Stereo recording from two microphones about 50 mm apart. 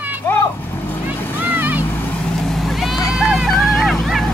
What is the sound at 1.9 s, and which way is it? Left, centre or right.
Vehicle, left.